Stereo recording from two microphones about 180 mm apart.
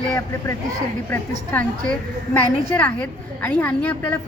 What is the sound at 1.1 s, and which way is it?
A woman's voice, 10° left (ahead or behind).